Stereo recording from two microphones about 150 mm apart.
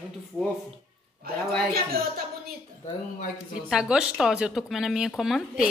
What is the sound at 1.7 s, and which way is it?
Speech, 90° right.